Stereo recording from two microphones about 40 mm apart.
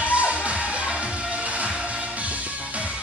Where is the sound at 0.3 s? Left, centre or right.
Right.